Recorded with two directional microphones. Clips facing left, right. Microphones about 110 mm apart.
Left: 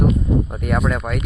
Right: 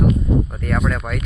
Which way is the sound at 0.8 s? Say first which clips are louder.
Left 1 dB; 5° left (ahead or behind).